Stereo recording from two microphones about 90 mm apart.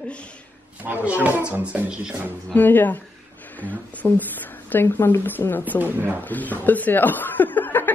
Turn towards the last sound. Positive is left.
turn(degrees=20)  # may be behind; listen again after turning